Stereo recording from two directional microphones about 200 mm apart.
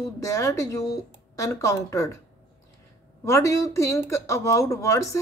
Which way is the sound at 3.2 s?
15° left (ahead or behind).